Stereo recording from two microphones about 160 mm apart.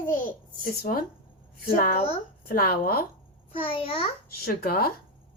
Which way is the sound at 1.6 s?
65° left (ahead or behind).